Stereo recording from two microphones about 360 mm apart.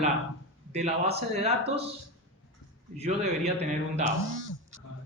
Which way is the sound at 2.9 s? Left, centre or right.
Centre.